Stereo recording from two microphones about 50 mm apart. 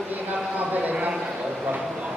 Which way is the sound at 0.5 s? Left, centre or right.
Right.